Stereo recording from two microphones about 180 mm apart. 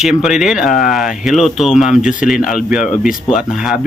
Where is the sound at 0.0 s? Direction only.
Centre (ahead or behind).